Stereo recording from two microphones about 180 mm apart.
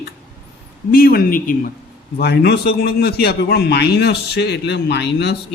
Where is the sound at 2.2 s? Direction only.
65° left (ahead or behind).